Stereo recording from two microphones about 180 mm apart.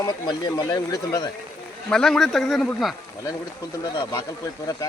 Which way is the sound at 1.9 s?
5° left (ahead or behind).